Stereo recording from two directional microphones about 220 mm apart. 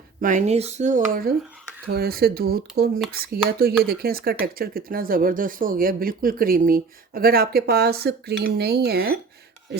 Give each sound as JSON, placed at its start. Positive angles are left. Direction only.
{"t": 0.2, "sound": "speech", "side_deg": -35}